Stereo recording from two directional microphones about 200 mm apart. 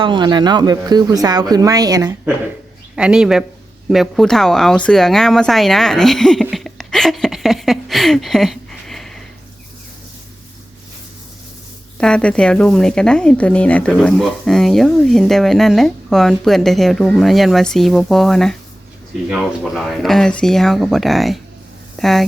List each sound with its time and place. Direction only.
0.0 s speech: 25° right (ahead or behind)
2.9 s speech: 5° right (ahead or behind)
11.9 s speech: 5° left (ahead or behind)